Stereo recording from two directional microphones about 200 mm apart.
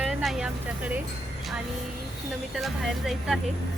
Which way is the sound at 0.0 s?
Centre (ahead or behind).